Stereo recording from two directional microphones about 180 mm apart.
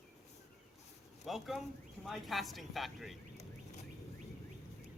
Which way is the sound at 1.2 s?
Centre (ahead or behind).